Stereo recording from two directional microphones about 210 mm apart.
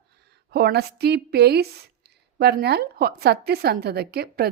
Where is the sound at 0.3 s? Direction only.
50° right (ahead or behind).